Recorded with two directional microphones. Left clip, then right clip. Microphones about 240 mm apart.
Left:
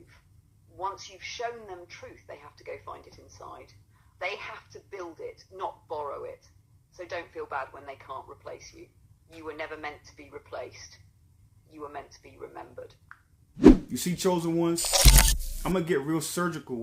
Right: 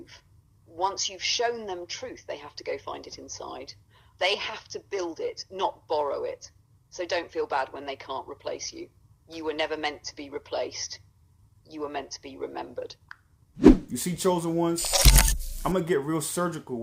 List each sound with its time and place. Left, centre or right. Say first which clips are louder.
0.8 s speech: right 7 dB; right
13.6 s speech: even; centre